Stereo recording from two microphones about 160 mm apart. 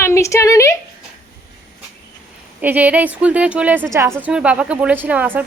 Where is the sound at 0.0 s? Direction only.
20° left (ahead or behind).